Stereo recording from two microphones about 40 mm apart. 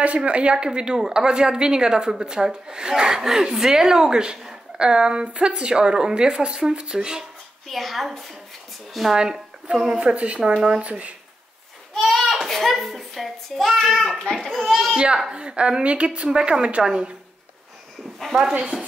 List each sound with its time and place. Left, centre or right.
0.0 s speech: right
7.7 s a woman's voice: centre
9.1 s a woman's voice: centre
9.9 s speech: right
12.0 s a sound: centre
14.1 s a child's voice: centre
14.7 s a child's voice: centre
15.3 s speech: right
16.3 s speech: centre